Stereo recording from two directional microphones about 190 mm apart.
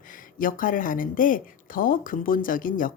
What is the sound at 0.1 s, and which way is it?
A woman's voice, 45° left (ahead or behind).